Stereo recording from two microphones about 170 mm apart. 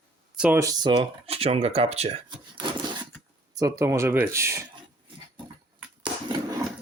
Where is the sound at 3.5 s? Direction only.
20° right (ahead or behind).